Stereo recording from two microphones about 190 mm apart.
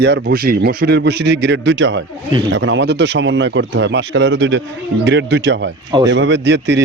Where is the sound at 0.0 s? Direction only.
60° right (ahead or behind).